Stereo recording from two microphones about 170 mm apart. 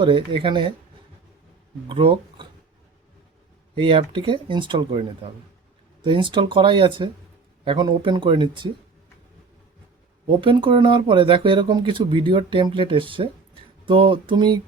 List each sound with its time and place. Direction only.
0.0 s speech: 30° right (ahead or behind)
1.9 s speech: 30° right (ahead or behind)
3.8 s speech: 30° right (ahead or behind)
10.2 s speech: 30° right (ahead or behind)